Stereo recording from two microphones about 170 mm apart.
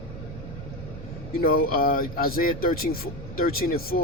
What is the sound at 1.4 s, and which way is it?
Speech, 60° left (ahead or behind).